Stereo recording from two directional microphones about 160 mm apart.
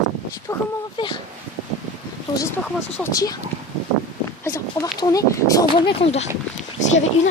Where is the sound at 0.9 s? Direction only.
30° left (ahead or behind).